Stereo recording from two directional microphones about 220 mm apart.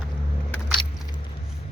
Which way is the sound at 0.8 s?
20° left (ahead or behind).